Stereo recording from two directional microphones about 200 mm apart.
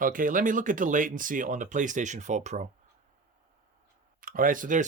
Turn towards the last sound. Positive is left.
turn(degrees=-40)  # may be behind; listen again after turning